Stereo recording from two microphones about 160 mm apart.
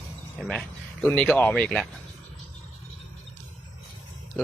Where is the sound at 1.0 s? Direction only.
10° left (ahead or behind).